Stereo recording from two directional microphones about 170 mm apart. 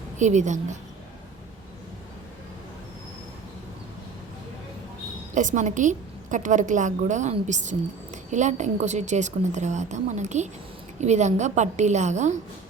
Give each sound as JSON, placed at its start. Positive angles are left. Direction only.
{"t": 0.2, "sound": "a woman's voice", "side_deg": -45}
{"t": 5.3, "sound": "a woman's voice", "side_deg": -50}